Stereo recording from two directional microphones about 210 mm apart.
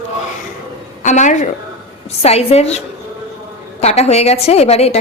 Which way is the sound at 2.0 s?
30° left (ahead or behind).